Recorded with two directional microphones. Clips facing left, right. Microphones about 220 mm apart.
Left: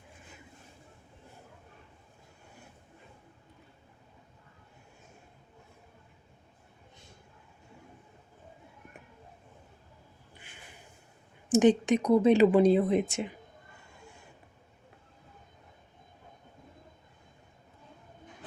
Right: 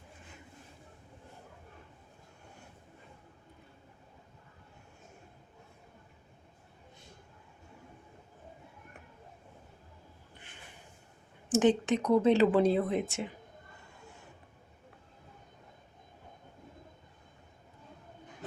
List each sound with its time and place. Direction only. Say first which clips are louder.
11.5 s speech: left 3 dB; 15° left (ahead or behind)